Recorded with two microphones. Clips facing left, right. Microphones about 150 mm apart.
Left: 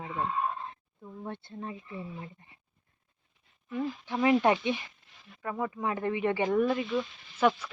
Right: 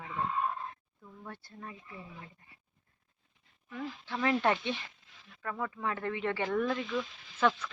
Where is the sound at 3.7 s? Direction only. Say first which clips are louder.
Left 6 dB; 20° left (ahead or behind).